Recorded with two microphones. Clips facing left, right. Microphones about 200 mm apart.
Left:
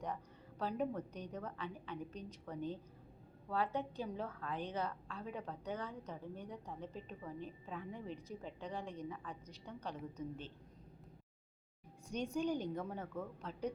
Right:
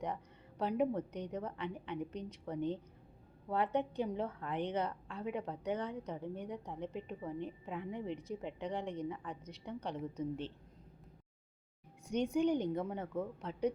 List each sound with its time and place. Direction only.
0.6 s a woman's voice: 20° right (ahead or behind)
12.1 s a woman's voice: 20° right (ahead or behind)